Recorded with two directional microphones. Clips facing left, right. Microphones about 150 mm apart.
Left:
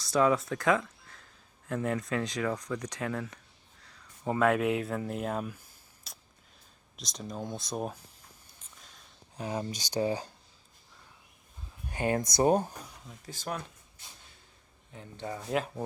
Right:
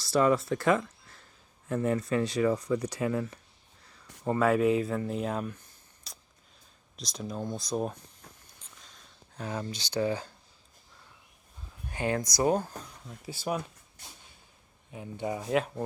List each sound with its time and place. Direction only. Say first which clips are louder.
0.0 s speech: right 1 dB; centre (ahead or behind)
6.1 s a sound: right 1 dB; centre (ahead or behind)
6.9 s speech: right 3 dB; centre (ahead or behind)
9.4 s speech: left 1 dB; 20° left (ahead or behind)
12.4 s speech: left 2 dB; 20° left (ahead or behind)
13.2 s speech: right 5 dB; 10° right (ahead or behind)
14.9 s speech: right 5 dB; 15° right (ahead or behind)
15.4 s speech: right 2 dB; centre (ahead or behind)